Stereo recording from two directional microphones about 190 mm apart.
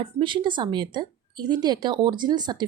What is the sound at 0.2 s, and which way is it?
A woman's voice, 25° right (ahead or behind).